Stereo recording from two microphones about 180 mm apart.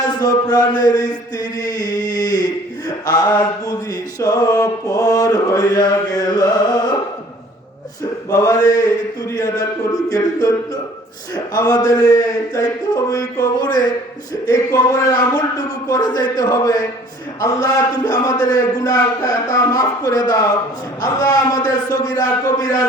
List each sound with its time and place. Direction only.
0.1 s mantra: 20° left (ahead or behind)
8.3 s mantra: 20° left (ahead or behind)
11.5 s mantra: 20° left (ahead or behind)